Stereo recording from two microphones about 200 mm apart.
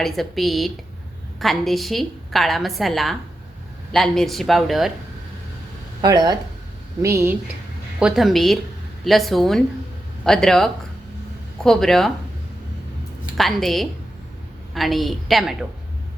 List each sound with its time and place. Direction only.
0.0 s a woman's voice: centre (ahead or behind)
6.0 s a woman's voice: 20° right (ahead or behind)
7.9 s a woman's voice: 5° right (ahead or behind)
13.3 s a woman's voice: centre (ahead or behind)